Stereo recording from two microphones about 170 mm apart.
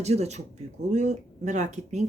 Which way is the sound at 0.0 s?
40° right (ahead or behind).